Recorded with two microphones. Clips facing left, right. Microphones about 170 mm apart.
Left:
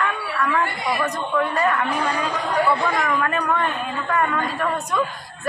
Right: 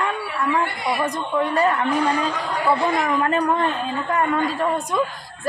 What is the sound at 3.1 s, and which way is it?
A man's voice, 25° right (ahead or behind).